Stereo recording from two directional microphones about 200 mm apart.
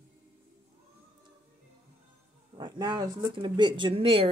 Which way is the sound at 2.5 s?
20° right (ahead or behind).